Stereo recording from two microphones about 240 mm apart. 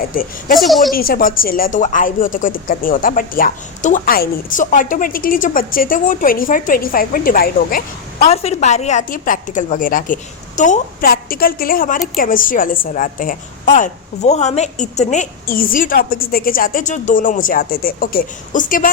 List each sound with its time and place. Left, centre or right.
0.1 s a woman's voice: left
0.5 s speech: centre
0.9 s a woman's voice: left